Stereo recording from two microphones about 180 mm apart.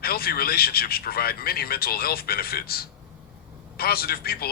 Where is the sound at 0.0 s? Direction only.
55° left (ahead or behind).